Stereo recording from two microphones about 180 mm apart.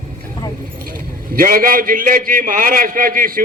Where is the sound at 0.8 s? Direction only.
50° right (ahead or behind).